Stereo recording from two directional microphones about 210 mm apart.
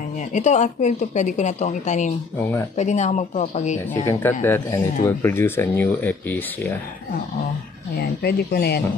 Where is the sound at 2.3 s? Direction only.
10° left (ahead or behind).